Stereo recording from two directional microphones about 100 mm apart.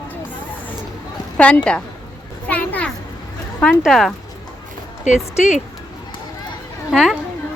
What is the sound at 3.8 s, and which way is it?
Speech, centre (ahead or behind).